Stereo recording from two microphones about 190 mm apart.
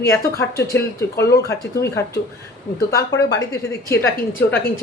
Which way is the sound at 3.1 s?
65° left (ahead or behind).